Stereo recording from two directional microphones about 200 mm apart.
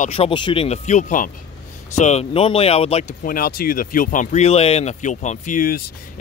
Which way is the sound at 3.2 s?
45° left (ahead or behind).